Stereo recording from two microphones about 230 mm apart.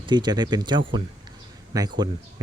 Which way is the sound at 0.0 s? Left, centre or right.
Centre.